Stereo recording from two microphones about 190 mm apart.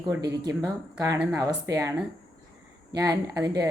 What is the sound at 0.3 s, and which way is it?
Speech, 15° right (ahead or behind).